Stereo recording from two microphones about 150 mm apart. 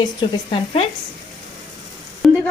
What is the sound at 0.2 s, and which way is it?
Speech, 35° left (ahead or behind).